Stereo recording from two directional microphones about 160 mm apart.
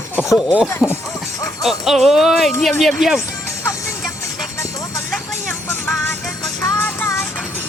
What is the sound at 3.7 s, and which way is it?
Music, 20° left (ahead or behind).